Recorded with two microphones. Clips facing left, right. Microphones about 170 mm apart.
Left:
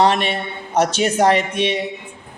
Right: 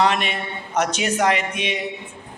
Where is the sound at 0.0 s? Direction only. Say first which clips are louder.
Left 4 dB; 30° left (ahead or behind).